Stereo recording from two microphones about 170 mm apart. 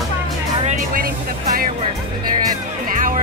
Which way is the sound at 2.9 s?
50° right (ahead or behind).